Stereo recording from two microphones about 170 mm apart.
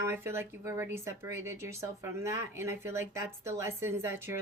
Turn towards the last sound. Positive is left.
turn(degrees=-15)  # may be behind; listen again after turning